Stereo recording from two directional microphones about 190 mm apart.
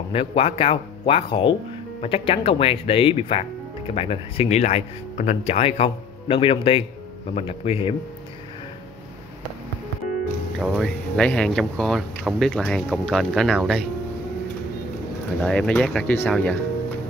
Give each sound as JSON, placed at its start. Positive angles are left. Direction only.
{"t": 0.1, "sound": "speech", "side_deg": 30}
{"t": 10.6, "sound": "speech", "side_deg": 0}
{"t": 15.4, "sound": "speech", "side_deg": 5}